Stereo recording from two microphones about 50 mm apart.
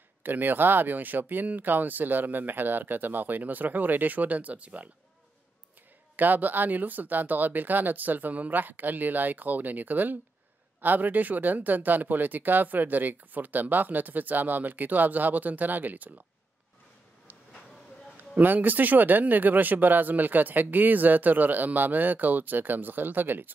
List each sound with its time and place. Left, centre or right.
0.2 s speech: right
6.1 s speech: right
18.1 s speech: right